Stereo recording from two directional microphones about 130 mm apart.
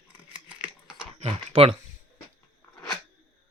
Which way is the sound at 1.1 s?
50° right (ahead or behind).